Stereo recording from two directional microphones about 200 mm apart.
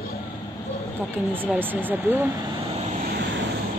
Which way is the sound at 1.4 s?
10° right (ahead or behind).